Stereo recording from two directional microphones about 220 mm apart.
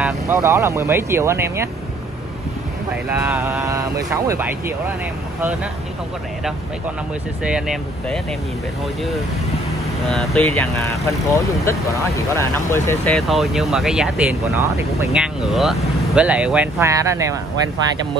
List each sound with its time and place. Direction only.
0.0 s speech: 10° right (ahead or behind)
3.2 s speech: 10° right (ahead or behind)
7.4 s speech: 5° right (ahead or behind)
10.0 s speech: centre (ahead or behind)
10.8 s speech: 15° left (ahead or behind); by 17.4 s 15° right (ahead or behind)